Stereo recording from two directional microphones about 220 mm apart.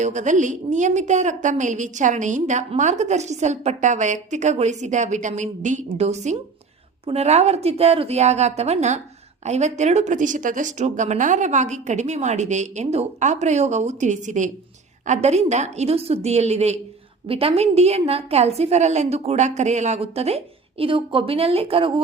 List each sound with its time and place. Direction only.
0.0 s a woman's voice: 35° right (ahead or behind)